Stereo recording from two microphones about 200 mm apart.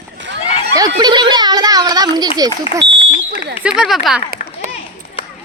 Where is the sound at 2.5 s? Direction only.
35° left (ahead or behind).